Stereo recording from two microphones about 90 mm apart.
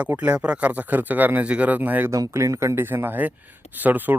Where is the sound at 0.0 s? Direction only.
15° right (ahead or behind).